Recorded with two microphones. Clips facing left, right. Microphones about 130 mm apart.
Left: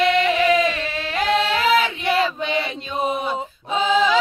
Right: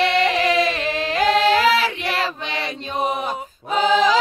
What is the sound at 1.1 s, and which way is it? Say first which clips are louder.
Music: right 3 dB; 35° right (ahead or behind).